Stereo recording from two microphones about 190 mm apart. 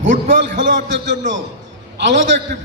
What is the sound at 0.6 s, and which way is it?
Speech, 70° right (ahead or behind).